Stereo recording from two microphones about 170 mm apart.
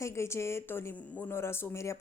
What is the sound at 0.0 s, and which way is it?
A woman's voice, 15° left (ahead or behind).